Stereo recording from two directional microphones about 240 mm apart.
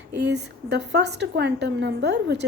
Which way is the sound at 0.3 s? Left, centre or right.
Right.